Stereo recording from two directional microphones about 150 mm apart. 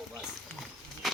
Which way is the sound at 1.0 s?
Centre (ahead or behind).